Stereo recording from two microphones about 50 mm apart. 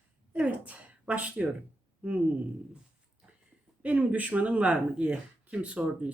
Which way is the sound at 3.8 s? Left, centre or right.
Right.